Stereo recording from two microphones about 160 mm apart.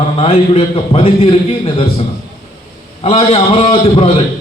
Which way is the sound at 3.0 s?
40° left (ahead or behind).